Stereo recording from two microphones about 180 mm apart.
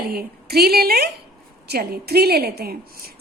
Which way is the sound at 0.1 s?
60° right (ahead or behind).